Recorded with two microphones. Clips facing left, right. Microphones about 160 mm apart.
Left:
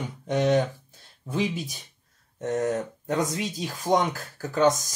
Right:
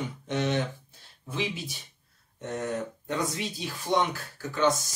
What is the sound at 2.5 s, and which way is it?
Speech, 45° left (ahead or behind).